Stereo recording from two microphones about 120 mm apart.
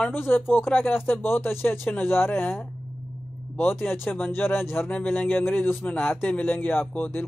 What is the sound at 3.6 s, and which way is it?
Speech, 15° left (ahead or behind).